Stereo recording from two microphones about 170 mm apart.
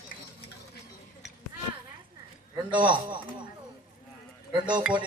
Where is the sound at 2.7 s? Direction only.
30° right (ahead or behind).